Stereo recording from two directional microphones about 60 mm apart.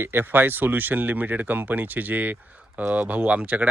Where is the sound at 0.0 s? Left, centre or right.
Right.